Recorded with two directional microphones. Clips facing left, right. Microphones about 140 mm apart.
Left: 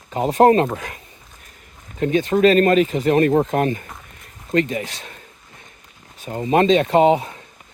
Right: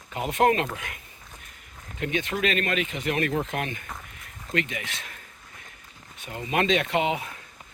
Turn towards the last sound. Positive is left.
turn(degrees=35)  # may be behind; listen again after turning